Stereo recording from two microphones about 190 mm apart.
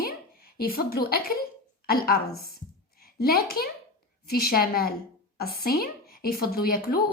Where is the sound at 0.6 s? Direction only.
50° left (ahead or behind).